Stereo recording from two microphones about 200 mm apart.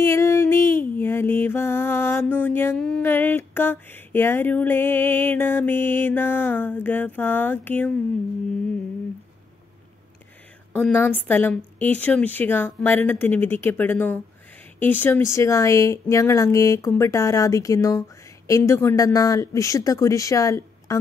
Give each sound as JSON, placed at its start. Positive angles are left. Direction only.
{"t": 0.0, "sound": "music", "side_deg": 15}
{"t": 10.8, "sound": "music", "side_deg": 10}